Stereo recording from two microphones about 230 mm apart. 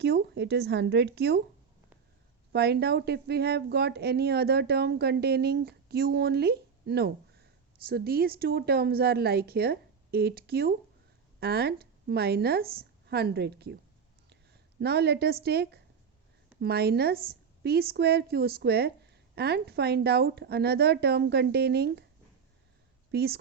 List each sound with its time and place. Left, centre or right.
0.0 s a woman's voice: right
2.5 s a woman's voice: right
14.8 s a woman's voice: right
23.1 s a woman's voice: right